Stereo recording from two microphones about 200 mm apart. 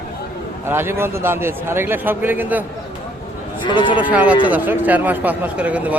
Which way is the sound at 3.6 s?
25° left (ahead or behind).